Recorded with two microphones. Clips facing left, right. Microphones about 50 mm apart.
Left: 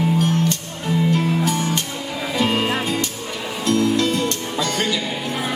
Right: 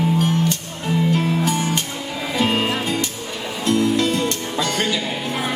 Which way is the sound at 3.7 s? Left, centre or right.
Right.